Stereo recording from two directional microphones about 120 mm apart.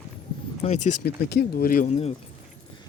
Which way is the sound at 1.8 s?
60° left (ahead or behind).